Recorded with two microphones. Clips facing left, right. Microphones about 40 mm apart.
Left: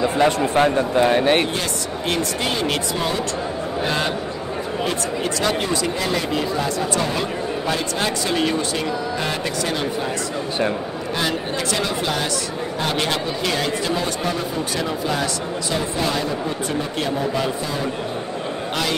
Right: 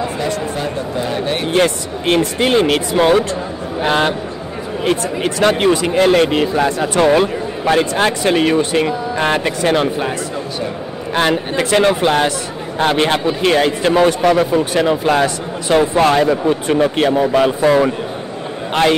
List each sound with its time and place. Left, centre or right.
0.2 s speech: left
1.5 s speech: right
3.0 s speech: right
4.8 s speech: right
11.1 s speech: right
14.3 s a man's voice: right